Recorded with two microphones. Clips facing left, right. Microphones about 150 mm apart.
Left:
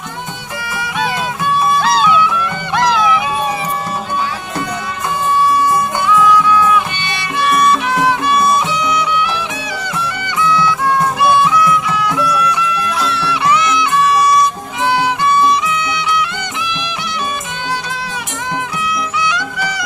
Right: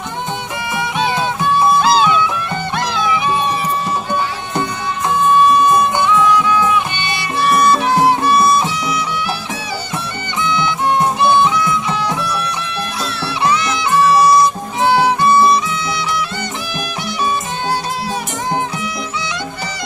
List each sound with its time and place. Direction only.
5.4 s music: 20° right (ahead or behind); by 9.4 s 35° right (ahead or behind)
10.4 s music: 25° right (ahead or behind)
18.9 s music: 30° right (ahead or behind)